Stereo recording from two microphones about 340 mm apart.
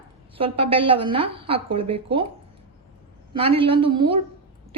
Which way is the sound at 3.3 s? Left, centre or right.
Centre.